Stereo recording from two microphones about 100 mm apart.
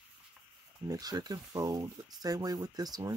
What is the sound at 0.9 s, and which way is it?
Speech, 40° right (ahead or behind).